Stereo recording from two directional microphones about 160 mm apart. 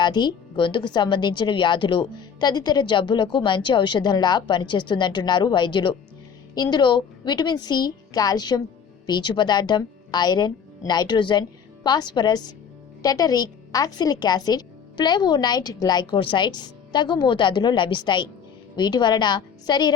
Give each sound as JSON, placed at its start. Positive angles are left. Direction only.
{"t": 0.0, "sound": "a woman's voice", "side_deg": 25}